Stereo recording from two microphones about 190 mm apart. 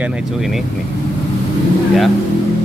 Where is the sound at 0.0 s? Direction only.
Centre (ahead or behind).